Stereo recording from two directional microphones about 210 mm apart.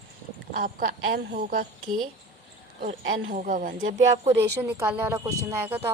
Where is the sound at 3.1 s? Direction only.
60° right (ahead or behind).